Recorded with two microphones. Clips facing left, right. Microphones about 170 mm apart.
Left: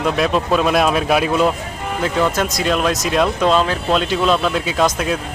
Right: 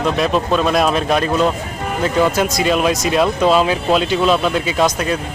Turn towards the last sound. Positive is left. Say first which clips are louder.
# right 1 dB
turn(degrees=0)  # may be behind; listen again after turning